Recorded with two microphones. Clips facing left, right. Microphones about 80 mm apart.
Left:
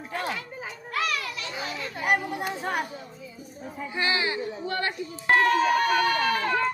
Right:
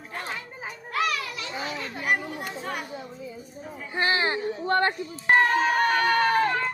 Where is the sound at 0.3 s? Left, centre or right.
Right.